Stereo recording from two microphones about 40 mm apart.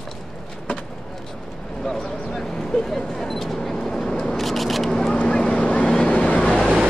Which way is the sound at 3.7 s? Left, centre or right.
Centre.